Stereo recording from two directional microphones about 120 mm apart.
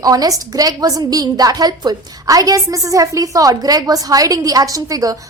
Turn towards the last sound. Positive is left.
turn(degrees=-30)  # may be behind; listen again after turning